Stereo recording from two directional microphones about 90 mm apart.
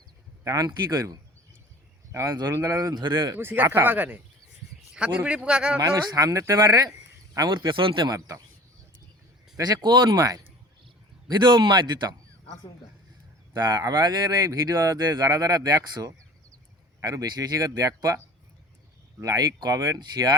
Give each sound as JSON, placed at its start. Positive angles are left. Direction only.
{"t": 0.4, "sound": "speech", "side_deg": -40}
{"t": 2.5, "sound": "speech", "side_deg": -25}
{"t": 2.9, "sound": "speech", "side_deg": -55}
{"t": 3.3, "sound": "a man's voice", "side_deg": -25}
{"t": 5.8, "sound": "speech", "side_deg": -45}
{"t": 7.7, "sound": "speech", "side_deg": -65}
{"t": 9.6, "sound": "speech", "side_deg": -45}
{"t": 10.2, "sound": "speech", "side_deg": -40}
{"t": 11.3, "sound": "speech", "side_deg": -55}
{"t": 13.6, "sound": "speech", "side_deg": -50}
{"t": 19.2, "sound": "speech", "side_deg": -40}